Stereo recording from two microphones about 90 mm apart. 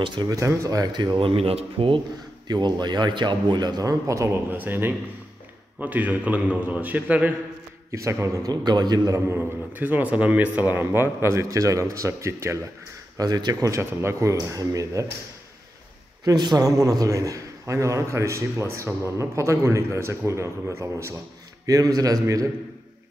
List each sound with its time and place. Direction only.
0.0 s speech: 60° right (ahead or behind)
0.3 s a man's voice: 40° right (ahead or behind)
1.1 s speech: 90° right
2.4 s a man's voice: 50° right (ahead or behind); by 4.4 s 35° right (ahead or behind)
4.5 s a man's voice: 20° right (ahead or behind)
7.9 s a man's voice: 35° right (ahead or behind)
8.5 s a man's voice: 50° right (ahead or behind)
9.3 s a man's voice: 20° right (ahead or behind)
13.2 s a man's voice: 45° right (ahead or behind)
16.3 s a man's voice: 45° right (ahead or behind)